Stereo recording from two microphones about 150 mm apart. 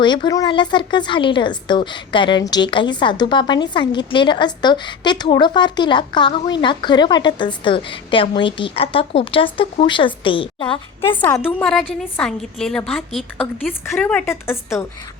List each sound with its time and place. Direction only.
0.0 s a woman's voice: 30° left (ahead or behind)
11.3 s a woman's voice: centre (ahead or behind); by 14.8 s 15° left (ahead or behind)